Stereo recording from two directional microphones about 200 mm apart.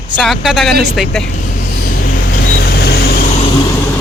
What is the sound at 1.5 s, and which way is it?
Vehicle, 45° left (ahead or behind).